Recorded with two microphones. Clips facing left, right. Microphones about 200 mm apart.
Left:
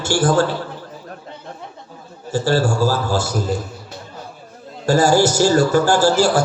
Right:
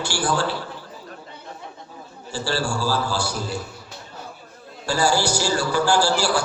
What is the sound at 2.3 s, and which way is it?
A man's voice, 45° left (ahead or behind).